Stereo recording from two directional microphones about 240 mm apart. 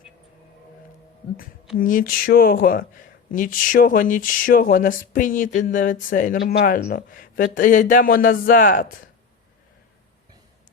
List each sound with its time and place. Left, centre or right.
1.8 s speech: left